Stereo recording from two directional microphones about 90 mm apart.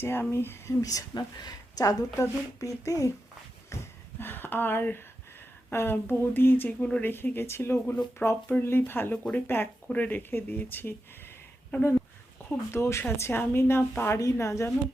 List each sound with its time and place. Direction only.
0.0 s speech: 25° left (ahead or behind)
4.2 s a woman's voice: 25° left (ahead or behind)
7.1 s a woman's voice: 25° left (ahead or behind)
12.7 s a woman's voice: 30° left (ahead or behind)